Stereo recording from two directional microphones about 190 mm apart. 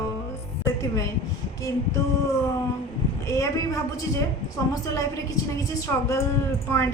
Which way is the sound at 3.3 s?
15° left (ahead or behind).